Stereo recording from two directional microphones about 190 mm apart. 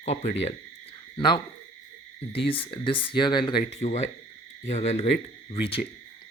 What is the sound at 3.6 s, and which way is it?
Speech, 35° left (ahead or behind).